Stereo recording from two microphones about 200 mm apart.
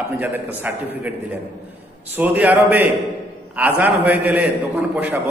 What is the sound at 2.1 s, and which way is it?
A man's voice, 10° right (ahead or behind).